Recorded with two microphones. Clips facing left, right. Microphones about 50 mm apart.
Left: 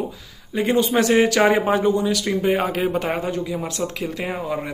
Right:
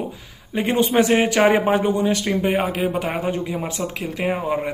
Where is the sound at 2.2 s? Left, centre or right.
Centre.